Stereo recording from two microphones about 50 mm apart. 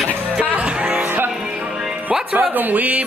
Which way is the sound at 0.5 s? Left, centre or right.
Right.